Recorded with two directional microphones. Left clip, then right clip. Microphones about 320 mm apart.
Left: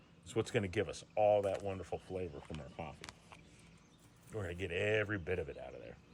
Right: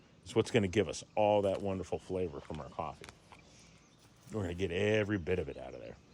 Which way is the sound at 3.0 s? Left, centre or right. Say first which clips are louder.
Even; centre.